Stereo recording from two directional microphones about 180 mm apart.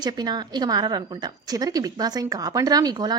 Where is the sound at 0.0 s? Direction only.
25° right (ahead or behind).